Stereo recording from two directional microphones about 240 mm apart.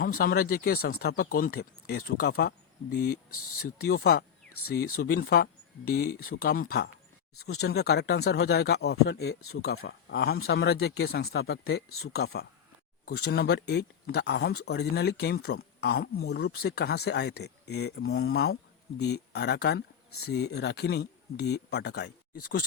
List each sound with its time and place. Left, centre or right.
0.0 s speech: left